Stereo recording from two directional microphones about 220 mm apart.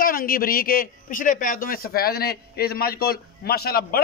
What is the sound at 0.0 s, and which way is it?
A man's voice, 40° left (ahead or behind).